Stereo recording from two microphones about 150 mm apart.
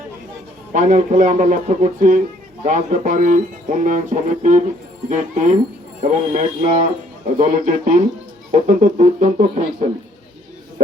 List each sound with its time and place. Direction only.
0.7 s speech: 55° right (ahead or behind)